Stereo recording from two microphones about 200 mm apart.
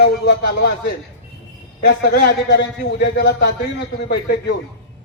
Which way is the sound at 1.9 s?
60° left (ahead or behind).